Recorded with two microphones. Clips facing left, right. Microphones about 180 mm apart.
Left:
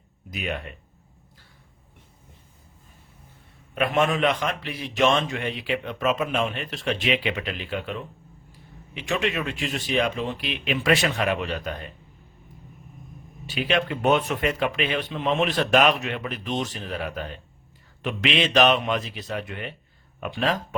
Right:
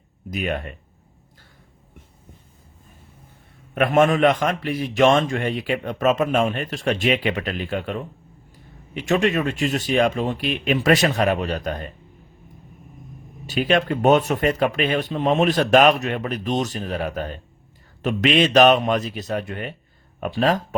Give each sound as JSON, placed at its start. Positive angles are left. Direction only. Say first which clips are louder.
{"t": 0.3, "sound": "a man's voice", "louder": "right 5 dB", "side_deg": -50}
{"t": 3.8, "sound": "a man's voice", "louder": "right 5 dB", "side_deg": -50}
{"t": 13.5, "sound": "a man's voice", "louder": "right 5 dB", "side_deg": -45}